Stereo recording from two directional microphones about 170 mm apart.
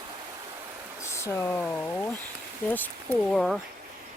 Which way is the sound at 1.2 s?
10° left (ahead or behind).